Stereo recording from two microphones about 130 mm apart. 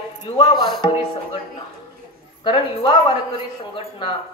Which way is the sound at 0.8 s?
40° left (ahead or behind).